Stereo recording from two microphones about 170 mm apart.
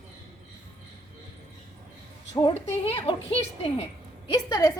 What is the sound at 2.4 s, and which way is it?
Speech, 40° left (ahead or behind).